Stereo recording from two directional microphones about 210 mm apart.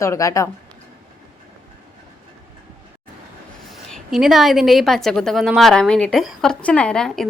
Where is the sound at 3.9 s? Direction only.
Centre (ahead or behind).